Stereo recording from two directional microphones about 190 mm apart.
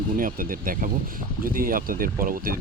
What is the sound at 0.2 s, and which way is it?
Speech, 45° right (ahead or behind).